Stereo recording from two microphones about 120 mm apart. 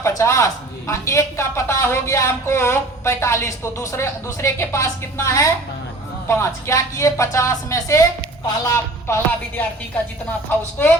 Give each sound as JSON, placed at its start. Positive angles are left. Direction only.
{"t": 0.0, "sound": "a man's voice", "side_deg": 25}